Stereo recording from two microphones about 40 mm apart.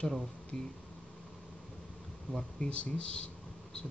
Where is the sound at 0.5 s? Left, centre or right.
Left.